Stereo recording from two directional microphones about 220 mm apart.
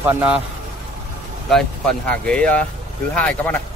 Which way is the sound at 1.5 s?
5° left (ahead or behind).